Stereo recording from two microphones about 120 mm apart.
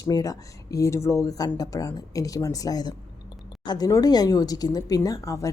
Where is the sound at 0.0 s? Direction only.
30° left (ahead or behind).